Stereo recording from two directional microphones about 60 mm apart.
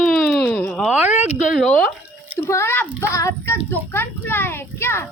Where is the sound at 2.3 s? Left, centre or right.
Left.